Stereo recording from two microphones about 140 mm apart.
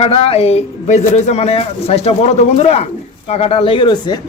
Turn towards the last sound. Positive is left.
turn(degrees=30)  # may be behind; listen again after turning